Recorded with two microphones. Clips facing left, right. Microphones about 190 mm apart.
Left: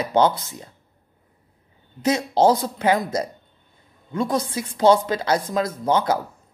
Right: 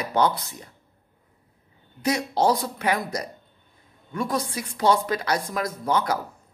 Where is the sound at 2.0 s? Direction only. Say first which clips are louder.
Left 4 dB; 25° left (ahead or behind).